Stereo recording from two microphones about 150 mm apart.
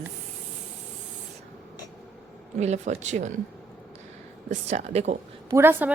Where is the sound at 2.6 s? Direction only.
50° right (ahead or behind).